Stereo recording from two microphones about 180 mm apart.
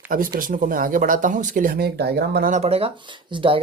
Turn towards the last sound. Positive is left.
turn(degrees=-30)  # may be behind; listen again after turning